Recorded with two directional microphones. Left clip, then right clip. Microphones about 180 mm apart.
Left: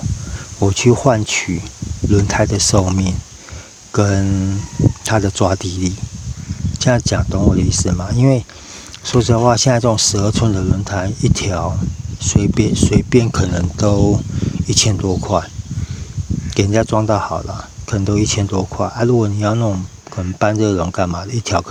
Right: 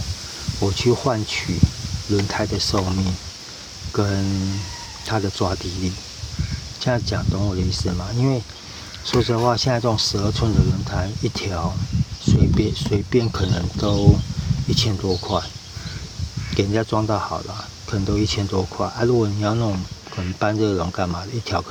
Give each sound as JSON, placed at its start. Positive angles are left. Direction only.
{"t": 0.6, "sound": "speech", "side_deg": 50}
{"t": 6.7, "sound": "speech", "side_deg": 55}
{"t": 16.6, "sound": "speech", "side_deg": 50}